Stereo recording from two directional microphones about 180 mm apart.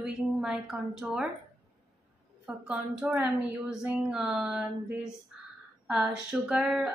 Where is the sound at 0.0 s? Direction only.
5° right (ahead or behind).